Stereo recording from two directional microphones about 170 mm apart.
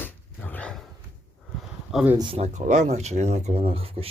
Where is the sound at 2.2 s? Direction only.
35° right (ahead or behind).